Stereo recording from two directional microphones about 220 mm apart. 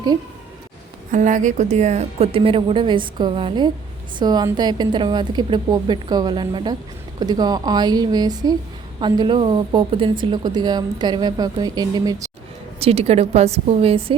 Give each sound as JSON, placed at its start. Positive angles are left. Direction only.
{"t": 1.1, "sound": "a woman's voice", "side_deg": -35}
{"t": 12.8, "sound": "a woman's voice", "side_deg": -25}